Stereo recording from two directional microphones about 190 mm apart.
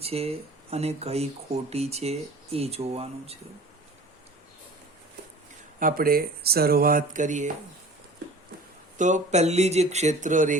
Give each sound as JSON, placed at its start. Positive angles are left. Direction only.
{"t": 0.0, "sound": "speech", "side_deg": -30}
{"t": 5.8, "sound": "speech", "side_deg": -50}
{"t": 9.0, "sound": "speech", "side_deg": -40}